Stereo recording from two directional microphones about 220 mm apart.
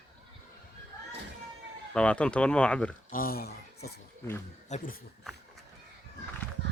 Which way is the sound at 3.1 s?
40° left (ahead or behind).